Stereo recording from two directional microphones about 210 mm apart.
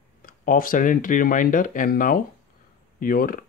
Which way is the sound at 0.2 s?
40° left (ahead or behind).